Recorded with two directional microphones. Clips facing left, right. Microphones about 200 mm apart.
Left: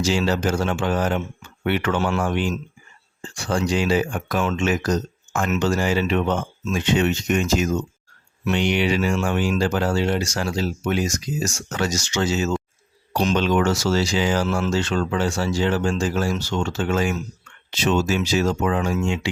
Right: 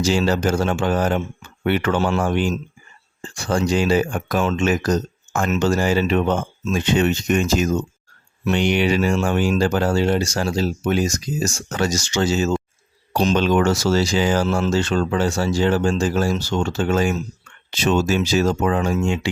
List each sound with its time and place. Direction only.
0.0 s speech: 40° right (ahead or behind)